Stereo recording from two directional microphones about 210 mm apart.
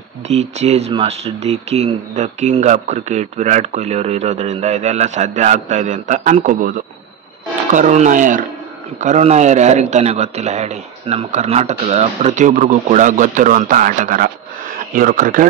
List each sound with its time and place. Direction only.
0.3 s speech: 30° right (ahead or behind)